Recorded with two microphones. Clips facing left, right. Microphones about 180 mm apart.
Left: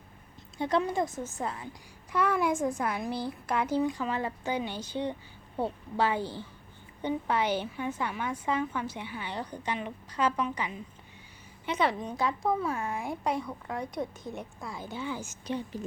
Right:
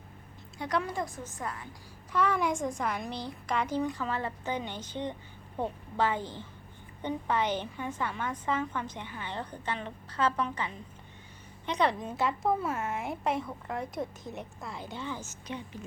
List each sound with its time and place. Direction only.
0.6 s a woman's voice: 25° left (ahead or behind)
2.1 s a woman's voice: 10° left (ahead or behind)
15.4 s a woman's voice: 35° left (ahead or behind)